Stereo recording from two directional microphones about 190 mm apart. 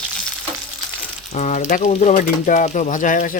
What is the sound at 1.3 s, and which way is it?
Speech, 40° left (ahead or behind).